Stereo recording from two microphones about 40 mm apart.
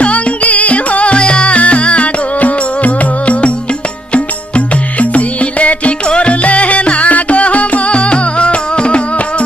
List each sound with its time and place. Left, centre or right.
0.0 s music: left